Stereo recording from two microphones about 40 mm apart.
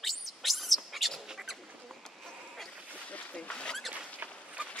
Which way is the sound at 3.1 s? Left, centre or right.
Left.